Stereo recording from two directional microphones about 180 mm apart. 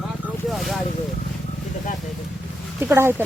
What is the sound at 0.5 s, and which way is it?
Vehicle, centre (ahead or behind).